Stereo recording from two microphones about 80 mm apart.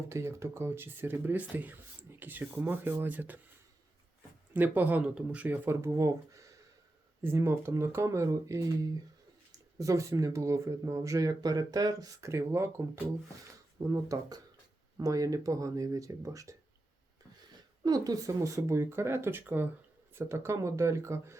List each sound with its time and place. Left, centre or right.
0.1 s speech: right
4.5 s speech: right
5.6 s speech: right
7.2 s speech: right
13.7 s speech: right
17.8 s speech: right